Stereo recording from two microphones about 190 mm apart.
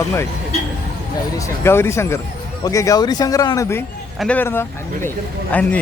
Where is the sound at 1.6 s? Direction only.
15° left (ahead or behind).